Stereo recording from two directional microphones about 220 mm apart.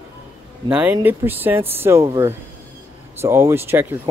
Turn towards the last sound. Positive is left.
turn(degrees=-10)  # may be behind; listen again after turning